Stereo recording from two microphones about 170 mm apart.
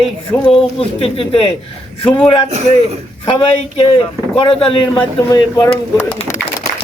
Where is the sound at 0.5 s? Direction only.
35° left (ahead or behind).